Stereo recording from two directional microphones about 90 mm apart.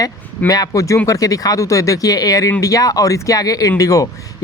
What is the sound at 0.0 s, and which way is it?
Speech, 45° left (ahead or behind).